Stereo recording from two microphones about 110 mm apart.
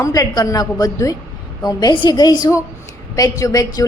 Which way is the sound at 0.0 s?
35° left (ahead or behind).